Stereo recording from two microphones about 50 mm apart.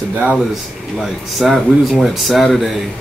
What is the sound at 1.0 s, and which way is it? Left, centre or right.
Speech, centre.